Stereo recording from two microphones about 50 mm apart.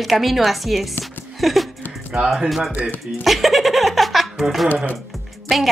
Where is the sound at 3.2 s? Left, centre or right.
Centre.